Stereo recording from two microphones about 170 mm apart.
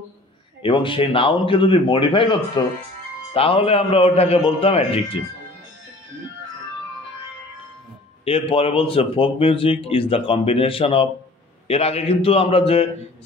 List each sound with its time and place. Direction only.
0.6 s speech: 30° left (ahead or behind)
8.3 s speech: 35° left (ahead or behind)